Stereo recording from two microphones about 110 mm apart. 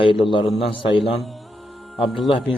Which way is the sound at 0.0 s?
50° left (ahead or behind).